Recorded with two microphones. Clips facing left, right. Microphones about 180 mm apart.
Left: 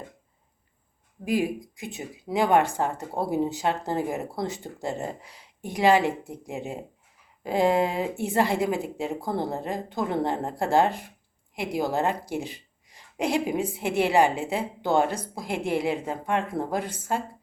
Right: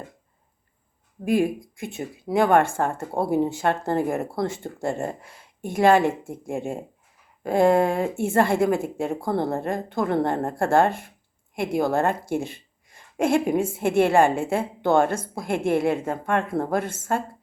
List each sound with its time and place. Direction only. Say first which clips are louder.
1.2 s speech: right 4 dB; 55° right (ahead or behind)